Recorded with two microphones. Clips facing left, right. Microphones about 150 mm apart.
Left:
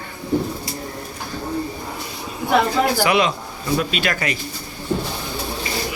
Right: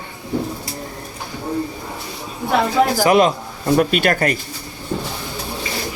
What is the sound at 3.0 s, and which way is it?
Speech, 45° right (ahead or behind).